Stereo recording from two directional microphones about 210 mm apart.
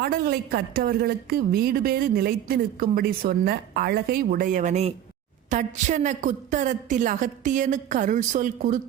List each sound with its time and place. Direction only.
0.0 s a woman's voice: 45° right (ahead or behind)